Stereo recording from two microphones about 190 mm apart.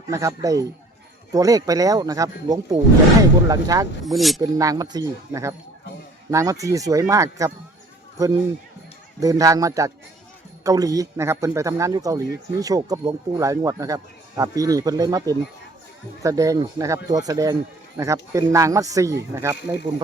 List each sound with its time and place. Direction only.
0.1 s speech: 15° right (ahead or behind)
4.0 s speech: centre (ahead or behind)
4.4 s speech: 20° right (ahead or behind)
9.2 s speech: 20° right (ahead or behind)